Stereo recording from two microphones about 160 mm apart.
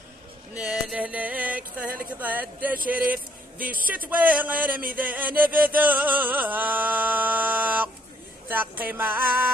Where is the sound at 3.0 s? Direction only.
60° right (ahead or behind).